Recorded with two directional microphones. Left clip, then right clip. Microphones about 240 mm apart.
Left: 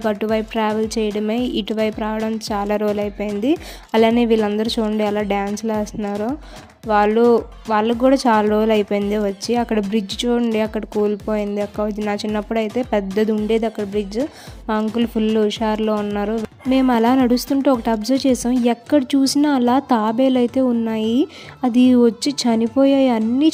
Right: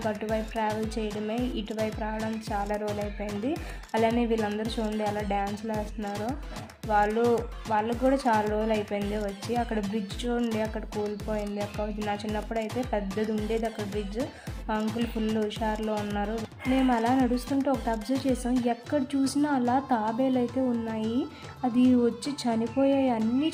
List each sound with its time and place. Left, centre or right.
0.0 s a woman's voice: left
14.7 s a woman's voice: left